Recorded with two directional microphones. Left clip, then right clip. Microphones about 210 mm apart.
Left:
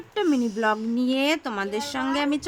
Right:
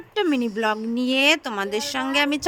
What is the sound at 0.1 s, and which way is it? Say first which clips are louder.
Speech: right 1 dB; 30° right (ahead or behind).